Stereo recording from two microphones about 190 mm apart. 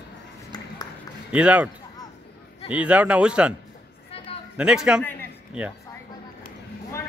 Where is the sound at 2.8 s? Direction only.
5° right (ahead or behind).